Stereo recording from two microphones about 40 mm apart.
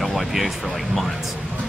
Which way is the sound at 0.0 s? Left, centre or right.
Centre.